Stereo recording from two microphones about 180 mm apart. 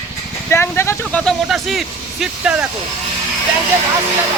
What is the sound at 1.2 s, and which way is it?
Speech, centre (ahead or behind).